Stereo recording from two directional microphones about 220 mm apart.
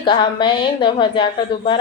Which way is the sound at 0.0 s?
20° left (ahead or behind).